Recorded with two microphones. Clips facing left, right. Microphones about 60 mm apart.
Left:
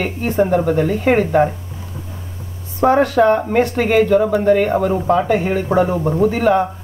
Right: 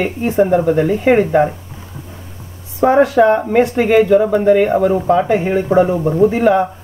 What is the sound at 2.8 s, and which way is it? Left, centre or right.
Speech, centre.